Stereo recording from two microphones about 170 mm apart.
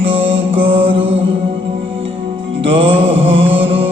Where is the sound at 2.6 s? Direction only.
35° right (ahead or behind).